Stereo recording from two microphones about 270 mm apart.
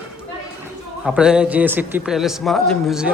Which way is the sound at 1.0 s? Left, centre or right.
Centre.